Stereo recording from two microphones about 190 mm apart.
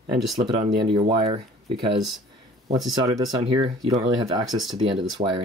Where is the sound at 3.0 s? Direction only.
20° right (ahead or behind).